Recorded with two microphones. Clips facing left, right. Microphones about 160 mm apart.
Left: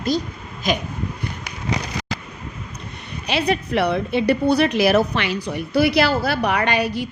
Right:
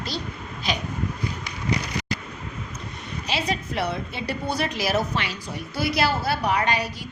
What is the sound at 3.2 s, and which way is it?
A woman's voice, 65° left (ahead or behind).